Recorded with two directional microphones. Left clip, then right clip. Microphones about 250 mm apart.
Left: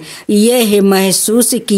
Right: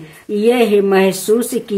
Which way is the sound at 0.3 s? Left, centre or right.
Left.